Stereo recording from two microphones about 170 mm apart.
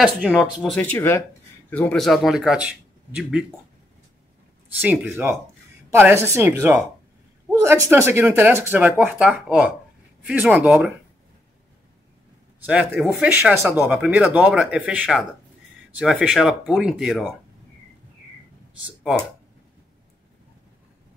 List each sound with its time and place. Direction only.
0.4 s speech: centre (ahead or behind)
4.8 s speech: 10° right (ahead or behind)
12.6 s speech: 5° right (ahead or behind)